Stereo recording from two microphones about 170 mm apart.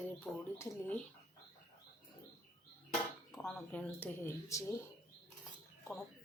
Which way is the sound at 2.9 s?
Centre (ahead or behind).